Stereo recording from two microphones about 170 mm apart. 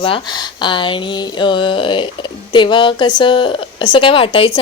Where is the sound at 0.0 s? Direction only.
30° left (ahead or behind).